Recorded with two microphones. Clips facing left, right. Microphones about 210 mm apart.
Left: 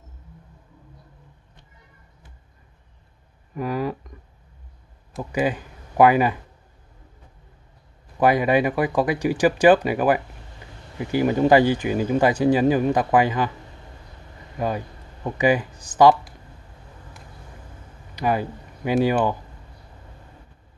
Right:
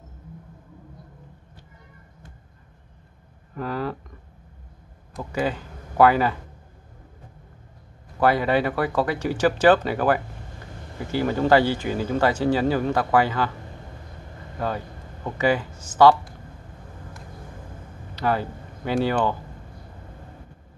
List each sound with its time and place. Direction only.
3.5 s a sound: 15° left (ahead or behind)
5.3 s speech: 15° left (ahead or behind)
8.2 s speech: 15° left (ahead or behind)
14.6 s speech: 15° left (ahead or behind)
18.1 s speech: 15° left (ahead or behind)